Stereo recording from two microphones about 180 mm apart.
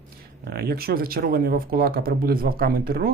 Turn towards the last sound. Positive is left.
turn(degrees=-55)  # may be behind; listen again after turning